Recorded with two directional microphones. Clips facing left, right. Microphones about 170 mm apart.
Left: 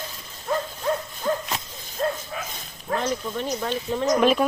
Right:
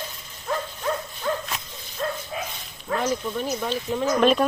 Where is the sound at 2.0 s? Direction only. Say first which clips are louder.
Left 3 dB; 35° left (ahead or behind).